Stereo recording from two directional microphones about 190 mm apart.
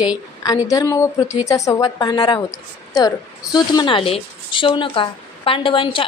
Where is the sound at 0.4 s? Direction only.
20° left (ahead or behind).